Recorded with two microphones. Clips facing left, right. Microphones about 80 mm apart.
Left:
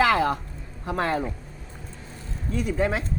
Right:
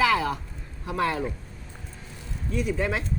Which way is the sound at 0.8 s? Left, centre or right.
Left.